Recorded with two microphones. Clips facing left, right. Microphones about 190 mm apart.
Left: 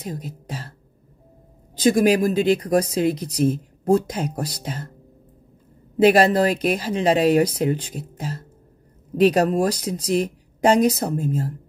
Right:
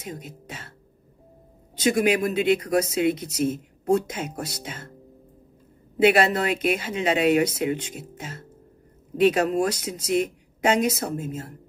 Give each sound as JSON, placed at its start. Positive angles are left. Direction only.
{"t": 0.0, "sound": "speech", "side_deg": 35}
{"t": 1.8, "sound": "speech", "side_deg": 35}
{"t": 6.0, "sound": "speech", "side_deg": 35}